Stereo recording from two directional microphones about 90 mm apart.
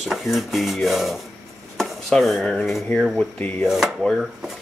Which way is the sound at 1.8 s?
5° left (ahead or behind).